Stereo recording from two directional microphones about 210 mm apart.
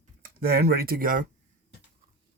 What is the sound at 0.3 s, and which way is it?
Speech, 45° right (ahead or behind).